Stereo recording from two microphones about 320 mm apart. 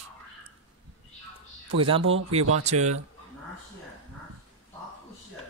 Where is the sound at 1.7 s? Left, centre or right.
Centre.